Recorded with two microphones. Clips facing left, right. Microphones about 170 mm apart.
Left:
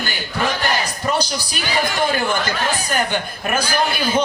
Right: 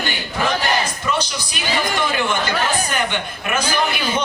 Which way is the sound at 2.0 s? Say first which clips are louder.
Left 1 dB; 35° left (ahead or behind).